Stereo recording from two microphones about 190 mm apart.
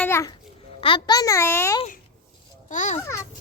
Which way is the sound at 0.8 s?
25° left (ahead or behind).